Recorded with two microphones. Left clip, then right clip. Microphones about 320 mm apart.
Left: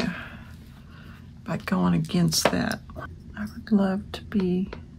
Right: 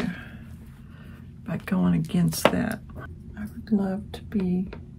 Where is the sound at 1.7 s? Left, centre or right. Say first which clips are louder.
Left 1 dB; centre.